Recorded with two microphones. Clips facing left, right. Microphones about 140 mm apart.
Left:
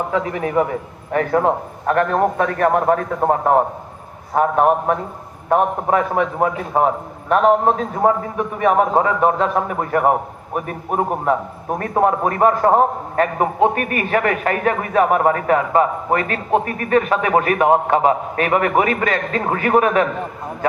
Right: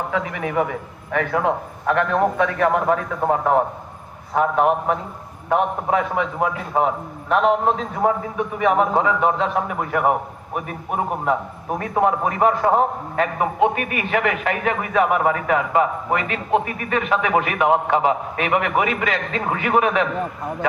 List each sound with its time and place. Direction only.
0.1 s a man's voice: 35° left (ahead or behind)